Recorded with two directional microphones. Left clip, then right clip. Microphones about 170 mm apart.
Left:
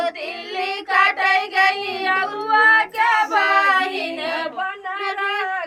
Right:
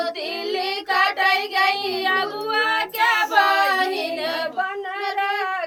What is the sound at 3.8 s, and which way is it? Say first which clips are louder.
Child singing: even; 20° right (ahead or behind).